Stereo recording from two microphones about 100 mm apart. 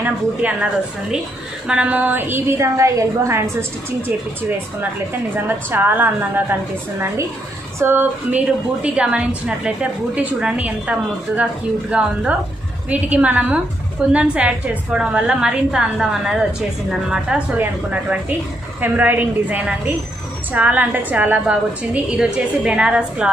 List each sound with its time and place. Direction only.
0.0 s a woman's voice: 15° right (ahead or behind)
1.7 s a woman's voice: 10° right (ahead or behind); by 3.5 s 30° right (ahead or behind)
5.3 s a woman's voice: 20° right (ahead or behind)
7.8 s a woman's voice: 20° right (ahead or behind)
18.8 s a woman's voice: 20° right (ahead or behind)